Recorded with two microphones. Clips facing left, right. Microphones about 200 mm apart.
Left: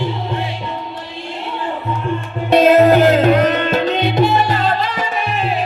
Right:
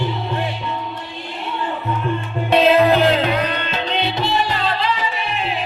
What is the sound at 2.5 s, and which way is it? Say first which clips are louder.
Music: left 4 dB; 45° left (ahead or behind).